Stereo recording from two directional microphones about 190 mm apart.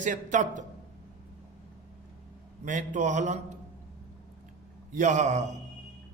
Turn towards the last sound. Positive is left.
turn(degrees=-40)  # may be behind; listen again after turning